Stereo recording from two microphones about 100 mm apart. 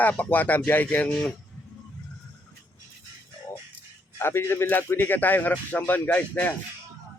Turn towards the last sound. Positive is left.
turn(degrees=15)  # may be behind; listen again after turning